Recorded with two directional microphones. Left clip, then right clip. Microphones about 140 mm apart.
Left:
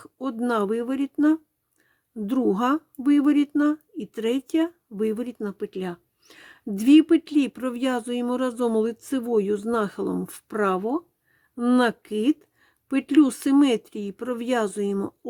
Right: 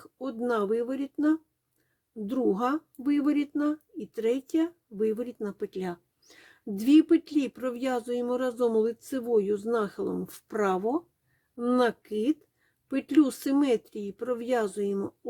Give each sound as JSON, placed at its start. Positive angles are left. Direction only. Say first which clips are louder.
{"t": 0.0, "sound": "speech", "louder": "left 4 dB", "side_deg": 35}
{"t": 11.5, "sound": "speech", "louder": "left 4 dB", "side_deg": 35}